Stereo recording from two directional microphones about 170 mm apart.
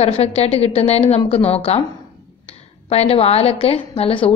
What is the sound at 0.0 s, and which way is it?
A woman's voice, 35° left (ahead or behind).